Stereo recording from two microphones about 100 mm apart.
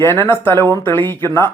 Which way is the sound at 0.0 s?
20° left (ahead or behind).